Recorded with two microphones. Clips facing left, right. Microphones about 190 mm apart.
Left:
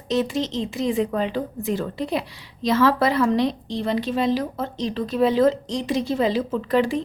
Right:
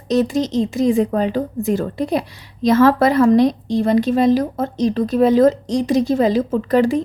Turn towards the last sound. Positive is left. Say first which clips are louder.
# right 5 dB
turn(degrees=-45)  # may be behind; listen again after turning